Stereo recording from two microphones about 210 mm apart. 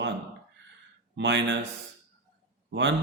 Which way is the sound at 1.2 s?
55° right (ahead or behind).